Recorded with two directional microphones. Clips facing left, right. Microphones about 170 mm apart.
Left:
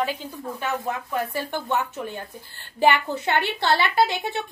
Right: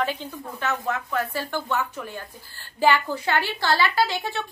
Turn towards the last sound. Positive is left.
turn(degrees=20)  # may be behind; listen again after turning